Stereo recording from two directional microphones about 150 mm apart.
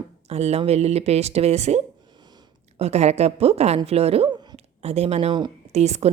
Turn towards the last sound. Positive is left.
turn(degrees=-45)  # may be behind; listen again after turning